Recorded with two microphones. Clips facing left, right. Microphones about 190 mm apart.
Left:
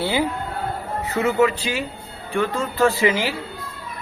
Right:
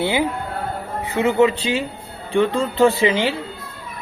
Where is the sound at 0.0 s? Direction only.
20° right (ahead or behind).